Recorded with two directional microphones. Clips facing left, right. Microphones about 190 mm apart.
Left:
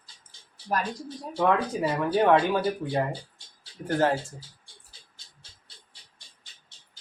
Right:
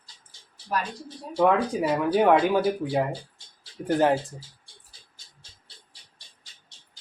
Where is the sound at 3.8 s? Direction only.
15° right (ahead or behind).